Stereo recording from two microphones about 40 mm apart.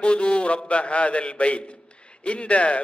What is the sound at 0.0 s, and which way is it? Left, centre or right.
A man's voice, left.